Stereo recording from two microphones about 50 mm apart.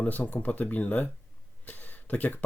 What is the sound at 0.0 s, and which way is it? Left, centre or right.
Speech, left.